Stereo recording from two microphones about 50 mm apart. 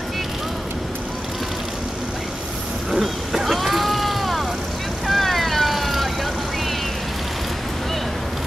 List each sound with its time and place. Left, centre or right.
2.9 s vehicle: centre
5.0 s cat: centre